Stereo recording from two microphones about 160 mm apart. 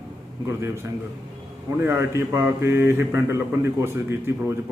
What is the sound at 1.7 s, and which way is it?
A man's voice, 15° right (ahead or behind).